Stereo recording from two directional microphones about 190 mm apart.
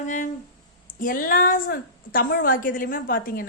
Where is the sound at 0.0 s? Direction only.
40° left (ahead or behind).